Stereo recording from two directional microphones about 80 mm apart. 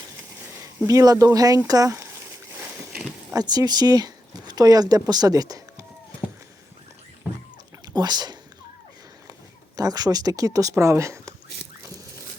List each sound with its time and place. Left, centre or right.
0.9 s speech: right
3.3 s speech: right
7.9 s speech: right
9.7 s speech: right